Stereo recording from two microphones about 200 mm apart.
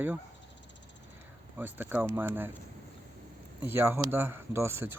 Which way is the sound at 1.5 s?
10° right (ahead or behind).